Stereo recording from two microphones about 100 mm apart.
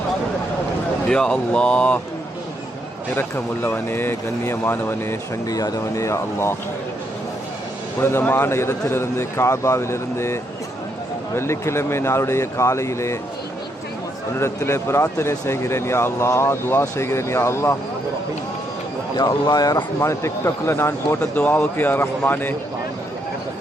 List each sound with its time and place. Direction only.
1.0 s speech: 5° left (ahead or behind)
3.2 s speech: 20° left (ahead or behind)
5.5 s speech: 35° left (ahead or behind)
8.0 s speech: 20° left (ahead or behind)
11.3 s speech: 25° left (ahead or behind)
14.3 s speech: 25° left (ahead or behind)
19.1 s speech: 40° left (ahead or behind); by 22.5 s 20° left (ahead or behind)